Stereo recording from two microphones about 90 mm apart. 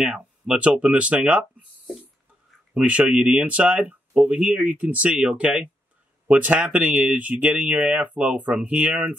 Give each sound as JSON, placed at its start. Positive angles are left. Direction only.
{"t": 0.0, "sound": "speech", "side_deg": -10}
{"t": 2.7, "sound": "speech", "side_deg": -15}